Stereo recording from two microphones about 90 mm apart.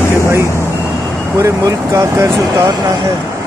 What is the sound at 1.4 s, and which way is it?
Speech, 35° right (ahead or behind).